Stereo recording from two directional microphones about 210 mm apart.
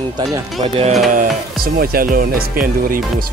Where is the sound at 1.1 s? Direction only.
40° right (ahead or behind).